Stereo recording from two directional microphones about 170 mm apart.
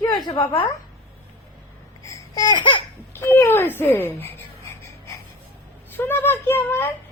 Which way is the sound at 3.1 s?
15° left (ahead or behind).